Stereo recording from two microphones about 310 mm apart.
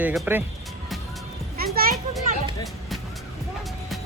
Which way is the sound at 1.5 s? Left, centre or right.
Right.